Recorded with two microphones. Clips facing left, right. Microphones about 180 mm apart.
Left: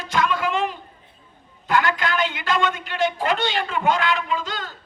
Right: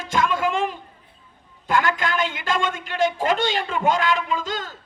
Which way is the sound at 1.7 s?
45° right (ahead or behind).